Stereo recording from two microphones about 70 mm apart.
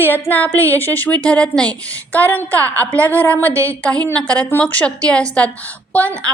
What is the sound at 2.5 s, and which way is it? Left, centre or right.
A woman's voice, right.